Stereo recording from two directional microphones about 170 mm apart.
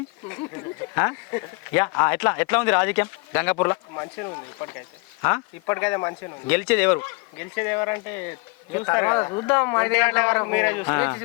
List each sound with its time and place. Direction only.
0.9 s speech: 15° left (ahead or behind)